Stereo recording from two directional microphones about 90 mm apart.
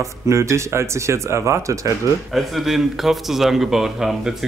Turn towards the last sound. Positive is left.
turn(degrees=-5)  # may be behind; listen again after turning